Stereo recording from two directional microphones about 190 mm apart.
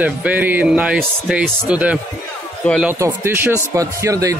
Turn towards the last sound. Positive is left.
turn(degrees=-15)  # may be behind; listen again after turning